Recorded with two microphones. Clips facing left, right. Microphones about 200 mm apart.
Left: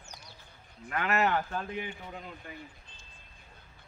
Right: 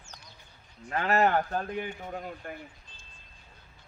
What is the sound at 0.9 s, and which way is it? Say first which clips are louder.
A man's voice: right 3 dB; 35° right (ahead or behind).